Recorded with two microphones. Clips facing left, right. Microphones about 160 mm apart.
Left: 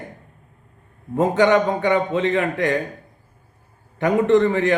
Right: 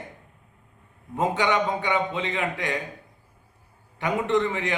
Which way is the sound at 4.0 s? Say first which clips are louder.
Left 8 dB; 45° left (ahead or behind).